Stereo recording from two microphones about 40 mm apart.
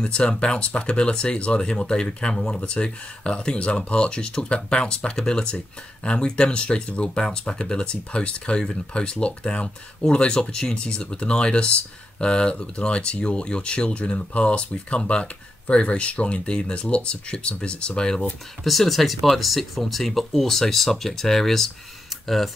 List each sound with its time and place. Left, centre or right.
0.0 s speech: left
18.6 s speech: centre